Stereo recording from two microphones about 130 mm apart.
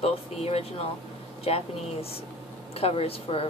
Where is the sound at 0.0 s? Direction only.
50° left (ahead or behind).